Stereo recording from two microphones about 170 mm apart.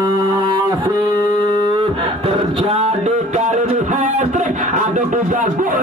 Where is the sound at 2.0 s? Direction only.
35° right (ahead or behind); by 5.8 s 55° right (ahead or behind).